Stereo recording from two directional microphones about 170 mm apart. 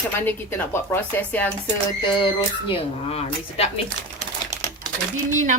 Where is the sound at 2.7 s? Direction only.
35° left (ahead or behind).